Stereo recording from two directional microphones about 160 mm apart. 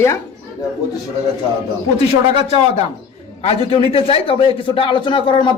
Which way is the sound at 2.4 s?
40° left (ahead or behind).